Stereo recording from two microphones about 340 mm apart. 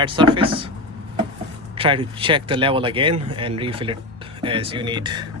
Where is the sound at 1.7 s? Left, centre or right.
Centre.